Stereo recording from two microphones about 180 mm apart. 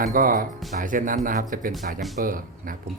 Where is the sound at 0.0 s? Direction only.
50° right (ahead or behind).